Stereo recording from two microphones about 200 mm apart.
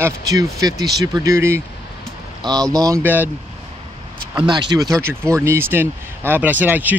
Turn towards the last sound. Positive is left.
turn(degrees=-10)  # may be behind; listen again after turning